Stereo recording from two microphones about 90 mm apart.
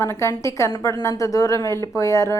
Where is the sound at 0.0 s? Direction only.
30° left (ahead or behind).